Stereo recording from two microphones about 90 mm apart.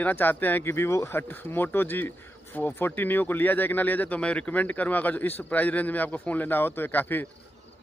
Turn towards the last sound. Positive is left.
turn(degrees=20)  # may be behind; listen again after turning